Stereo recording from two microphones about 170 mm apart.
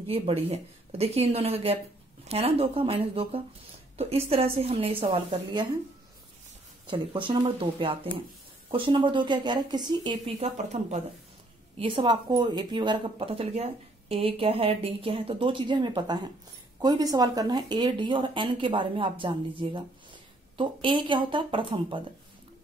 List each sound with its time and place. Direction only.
0.0 s speech: 35° right (ahead or behind)
6.9 s speech: 30° right (ahead or behind)
11.8 s speech: 30° right (ahead or behind)